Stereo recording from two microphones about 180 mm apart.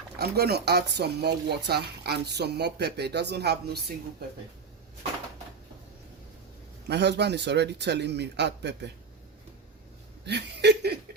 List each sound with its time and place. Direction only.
0.2 s speech: 60° right (ahead or behind)
6.8 s speech: 70° right (ahead or behind)
10.2 s speech: 70° right (ahead or behind)